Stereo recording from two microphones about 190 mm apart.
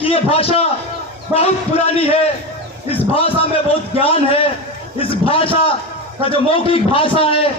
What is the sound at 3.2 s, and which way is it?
A man's voice, 30° left (ahead or behind).